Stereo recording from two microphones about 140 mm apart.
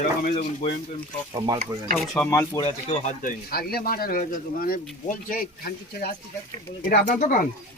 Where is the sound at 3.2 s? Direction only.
80° left.